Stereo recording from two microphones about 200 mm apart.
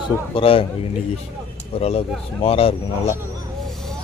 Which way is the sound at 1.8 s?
30° left (ahead or behind).